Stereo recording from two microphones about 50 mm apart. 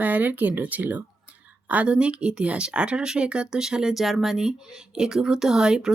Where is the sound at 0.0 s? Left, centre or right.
Right.